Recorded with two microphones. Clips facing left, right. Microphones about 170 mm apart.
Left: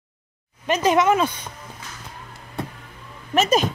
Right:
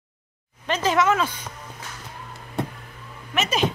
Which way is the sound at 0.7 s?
15° left (ahead or behind).